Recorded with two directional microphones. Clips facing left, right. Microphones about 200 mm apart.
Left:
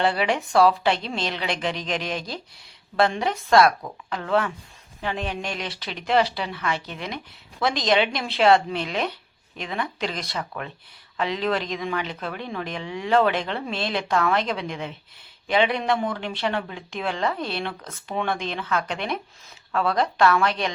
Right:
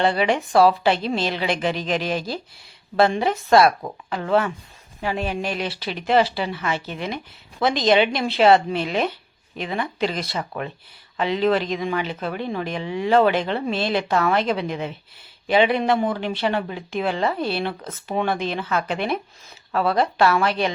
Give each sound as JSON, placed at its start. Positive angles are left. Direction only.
{"t": 0.0, "sound": "speech", "side_deg": 0}
{"t": 3.5, "sound": "speech", "side_deg": -25}
{"t": 4.1, "sound": "speech", "side_deg": -5}
{"t": 10.5, "sound": "speech", "side_deg": -25}
{"t": 11.2, "sound": "speech", "side_deg": 0}